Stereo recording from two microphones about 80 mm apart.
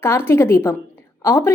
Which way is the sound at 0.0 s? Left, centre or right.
Left.